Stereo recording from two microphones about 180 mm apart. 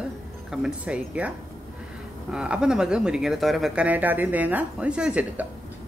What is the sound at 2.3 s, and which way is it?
Speech, 5° right (ahead or behind).